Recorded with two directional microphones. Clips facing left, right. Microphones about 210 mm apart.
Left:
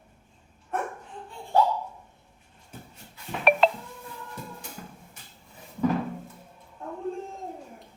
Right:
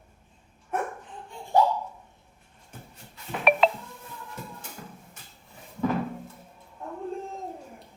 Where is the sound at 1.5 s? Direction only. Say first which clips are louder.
Right 1 dB; 15° right (ahead or behind).